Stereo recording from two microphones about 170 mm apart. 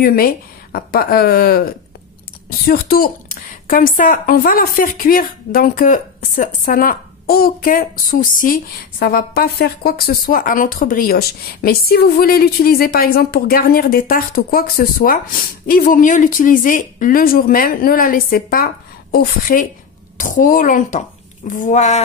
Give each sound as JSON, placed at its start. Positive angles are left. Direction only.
{"t": 0.0, "sound": "a woman's voice", "side_deg": 60}